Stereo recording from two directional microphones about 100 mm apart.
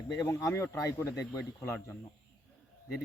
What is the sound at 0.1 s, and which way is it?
A man's voice, 30° left (ahead or behind).